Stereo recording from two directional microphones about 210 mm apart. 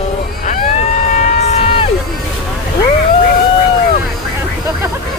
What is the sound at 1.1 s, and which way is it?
Civil defense siren, 35° left (ahead or behind).